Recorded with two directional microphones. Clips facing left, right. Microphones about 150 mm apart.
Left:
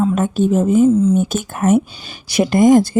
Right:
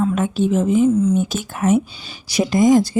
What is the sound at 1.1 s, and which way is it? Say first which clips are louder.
Speech: left 3 dB; 50° left (ahead or behind).